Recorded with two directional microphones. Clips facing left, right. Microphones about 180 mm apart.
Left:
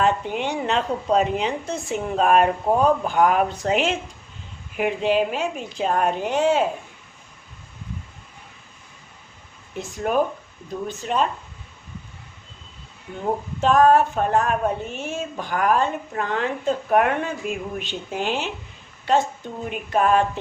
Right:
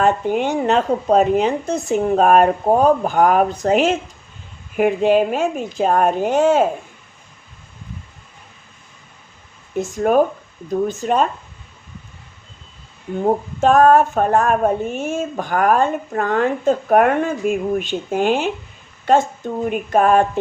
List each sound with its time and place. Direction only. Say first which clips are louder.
0.0 s speech: right 5 dB; 45° right (ahead or behind)
9.7 s speech: right 7 dB; 45° right (ahead or behind)
13.2 s speech: right 5 dB; 45° right (ahead or behind)